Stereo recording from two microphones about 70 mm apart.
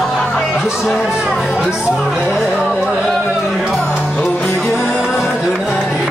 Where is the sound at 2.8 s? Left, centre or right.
Centre.